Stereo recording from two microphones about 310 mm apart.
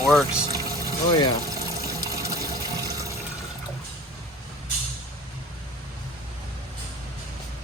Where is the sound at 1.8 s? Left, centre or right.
Centre.